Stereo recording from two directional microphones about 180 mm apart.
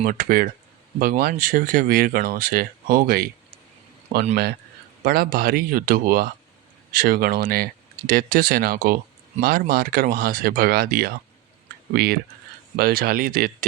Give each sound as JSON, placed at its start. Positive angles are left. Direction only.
{"t": 0.0, "sound": "speech", "side_deg": -50}
{"t": 5.0, "sound": "speech", "side_deg": -55}